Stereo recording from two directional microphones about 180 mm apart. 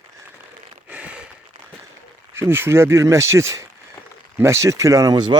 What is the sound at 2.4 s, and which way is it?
Speech, 15° right (ahead or behind).